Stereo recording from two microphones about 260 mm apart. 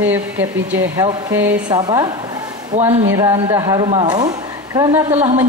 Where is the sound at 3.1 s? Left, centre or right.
Centre.